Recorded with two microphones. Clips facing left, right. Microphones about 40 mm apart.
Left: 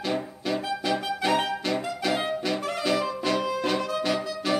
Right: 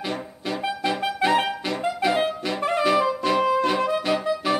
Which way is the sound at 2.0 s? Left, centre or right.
Centre.